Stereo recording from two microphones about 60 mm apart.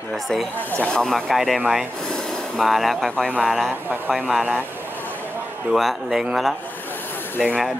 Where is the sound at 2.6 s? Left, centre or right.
Centre.